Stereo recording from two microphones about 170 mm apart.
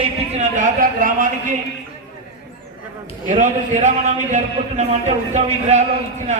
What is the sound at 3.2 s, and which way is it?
A man's voice, 45° right (ahead or behind).